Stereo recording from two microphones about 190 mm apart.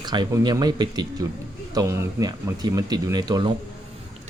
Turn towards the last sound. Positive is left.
turn(degrees=-20)  # may be behind; listen again after turning